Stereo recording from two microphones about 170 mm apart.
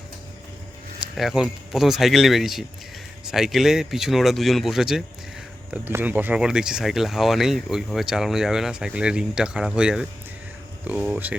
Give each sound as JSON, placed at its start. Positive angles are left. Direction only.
{"t": 1.1, "sound": "speech", "side_deg": 0}